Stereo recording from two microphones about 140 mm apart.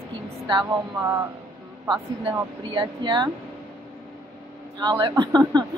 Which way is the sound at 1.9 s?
35° right (ahead or behind).